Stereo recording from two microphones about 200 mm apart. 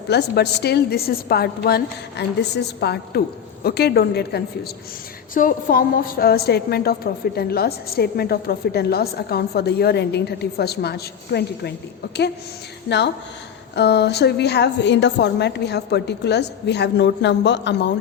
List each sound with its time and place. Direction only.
0.1 s a woman's voice: 55° left (ahead or behind)
5.3 s a woman's voice: 45° left (ahead or behind)
13.7 s a woman's voice: 55° left (ahead or behind)